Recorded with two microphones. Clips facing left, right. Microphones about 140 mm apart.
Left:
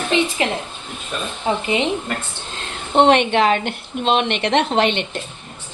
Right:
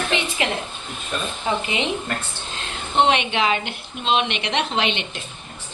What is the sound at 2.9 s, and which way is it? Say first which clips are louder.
A woman's voice: left 6 dB; 55° left (ahead or behind).